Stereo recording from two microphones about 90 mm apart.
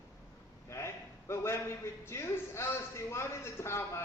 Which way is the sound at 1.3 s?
30° left (ahead or behind).